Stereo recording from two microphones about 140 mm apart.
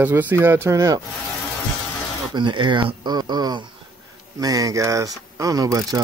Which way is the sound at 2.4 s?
35° right (ahead or behind).